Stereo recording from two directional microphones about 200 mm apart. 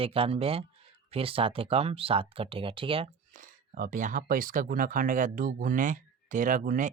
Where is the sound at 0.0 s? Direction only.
30° right (ahead or behind).